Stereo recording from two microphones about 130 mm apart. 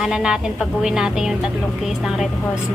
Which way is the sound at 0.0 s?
5° right (ahead or behind).